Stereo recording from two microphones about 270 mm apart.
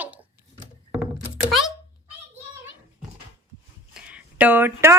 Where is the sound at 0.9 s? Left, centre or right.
Centre.